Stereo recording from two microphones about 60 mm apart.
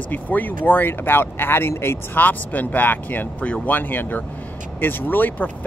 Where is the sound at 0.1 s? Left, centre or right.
Left.